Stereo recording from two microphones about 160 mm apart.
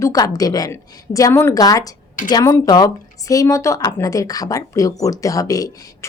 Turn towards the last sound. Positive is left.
turn(degrees=20)  # may be behind; listen again after turning